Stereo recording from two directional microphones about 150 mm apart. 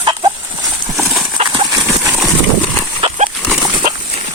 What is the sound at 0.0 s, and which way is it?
Horse, 30° right (ahead or behind).